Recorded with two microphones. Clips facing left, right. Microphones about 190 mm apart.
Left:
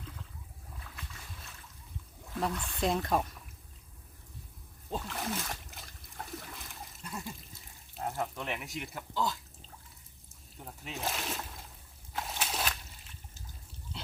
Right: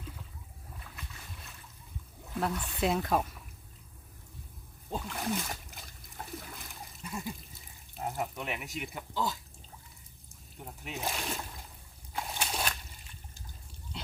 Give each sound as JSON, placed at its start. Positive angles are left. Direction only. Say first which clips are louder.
{"t": 0.9, "sound": "boat", "louder": "even", "side_deg": 0}
{"t": 2.3, "sound": "speech", "louder": "right 1 dB", "side_deg": -5}
{"t": 4.9, "sound": "splash", "louder": "right 2 dB", "side_deg": 0}
{"t": 7.9, "sound": "speech", "louder": "even", "side_deg": -5}
{"t": 10.6, "sound": "speech", "louder": "right 1 dB", "side_deg": -5}
{"t": 12.1, "sound": "slosh", "louder": "right 1 dB", "side_deg": 0}